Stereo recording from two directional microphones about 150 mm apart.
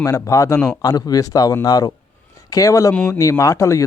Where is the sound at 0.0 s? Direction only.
20° left (ahead or behind).